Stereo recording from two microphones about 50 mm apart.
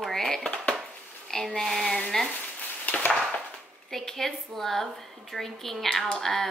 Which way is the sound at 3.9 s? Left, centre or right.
Centre.